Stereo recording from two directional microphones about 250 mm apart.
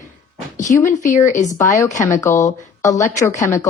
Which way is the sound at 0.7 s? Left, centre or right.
Centre.